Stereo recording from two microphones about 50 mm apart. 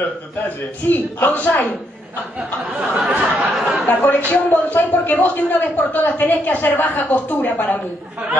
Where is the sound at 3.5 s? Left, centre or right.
Centre.